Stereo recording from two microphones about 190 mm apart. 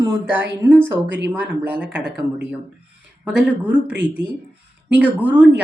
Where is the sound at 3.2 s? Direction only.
5° right (ahead or behind).